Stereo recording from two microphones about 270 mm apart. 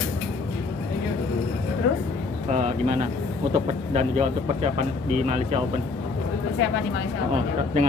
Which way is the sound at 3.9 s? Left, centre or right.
Right.